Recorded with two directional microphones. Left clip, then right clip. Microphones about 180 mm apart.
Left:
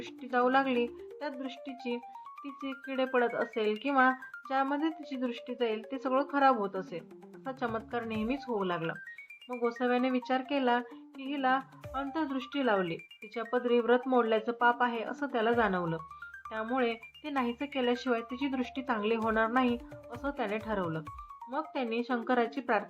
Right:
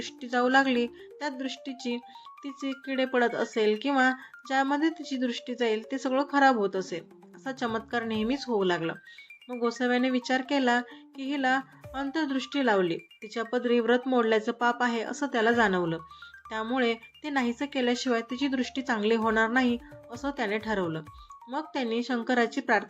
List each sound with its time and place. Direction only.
0.0 s speech: 25° right (ahead or behind)